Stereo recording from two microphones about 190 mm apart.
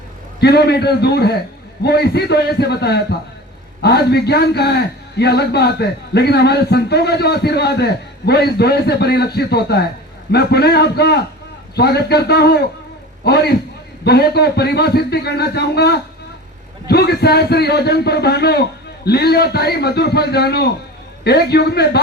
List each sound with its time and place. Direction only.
0.3 s a man's voice: 60° left (ahead or behind)